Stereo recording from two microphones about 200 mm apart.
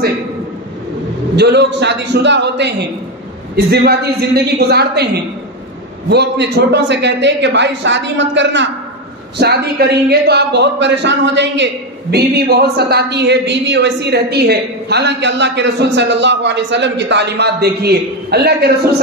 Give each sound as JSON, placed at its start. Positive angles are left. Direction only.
{"t": 1.3, "sound": "a man's voice", "side_deg": -55}
{"t": 9.4, "sound": "speech", "side_deg": -55}